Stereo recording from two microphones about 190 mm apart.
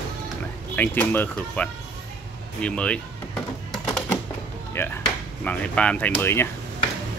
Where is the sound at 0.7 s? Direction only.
10° left (ahead or behind).